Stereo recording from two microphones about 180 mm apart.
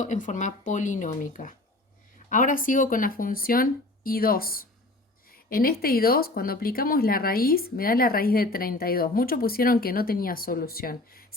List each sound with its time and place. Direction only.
0.0 s speech: 45° left (ahead or behind)